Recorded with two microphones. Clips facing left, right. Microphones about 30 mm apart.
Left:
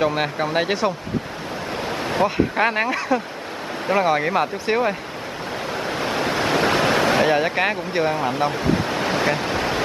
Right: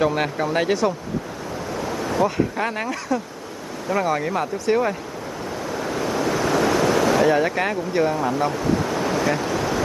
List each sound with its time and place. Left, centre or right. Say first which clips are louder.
0.0 s speech: even; centre
1.9 s waves: even; left
2.2 s speech: left 5 dB; left
5.8 s waves: even; left
7.3 s speech: left 1 dB; left
9.3 s waves: even; left